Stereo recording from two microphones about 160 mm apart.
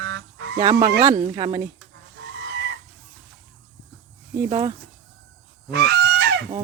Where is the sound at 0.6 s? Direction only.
20° right (ahead or behind).